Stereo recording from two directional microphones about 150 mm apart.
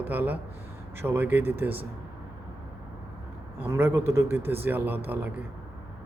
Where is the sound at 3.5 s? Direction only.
15° right (ahead or behind).